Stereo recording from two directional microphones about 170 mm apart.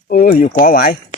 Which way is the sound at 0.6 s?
55° left (ahead or behind).